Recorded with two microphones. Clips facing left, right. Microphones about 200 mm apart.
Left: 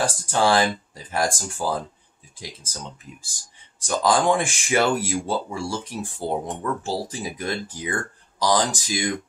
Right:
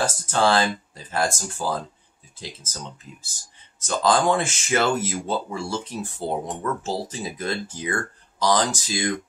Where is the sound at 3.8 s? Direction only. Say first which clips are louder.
Even; 15° left (ahead or behind).